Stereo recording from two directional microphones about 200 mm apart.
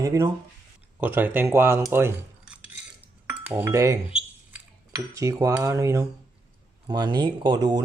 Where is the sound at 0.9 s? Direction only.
10° right (ahead or behind).